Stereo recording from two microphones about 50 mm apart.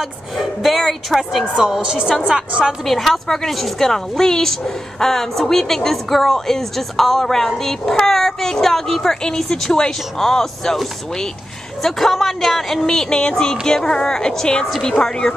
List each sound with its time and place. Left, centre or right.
0.4 s speech: centre
1.7 s a woman's voice: centre
2.8 s a woman's voice: centre
12.8 s a woman's voice: centre